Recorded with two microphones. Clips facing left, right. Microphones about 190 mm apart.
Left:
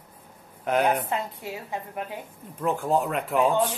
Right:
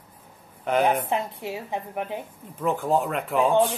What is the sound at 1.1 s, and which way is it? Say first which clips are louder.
A woman's voice: right 3 dB; 25° right (ahead or behind).